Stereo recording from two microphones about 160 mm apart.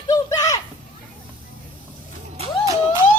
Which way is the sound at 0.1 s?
20° left (ahead or behind).